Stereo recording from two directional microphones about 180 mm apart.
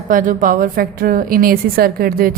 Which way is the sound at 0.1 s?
45° right (ahead or behind).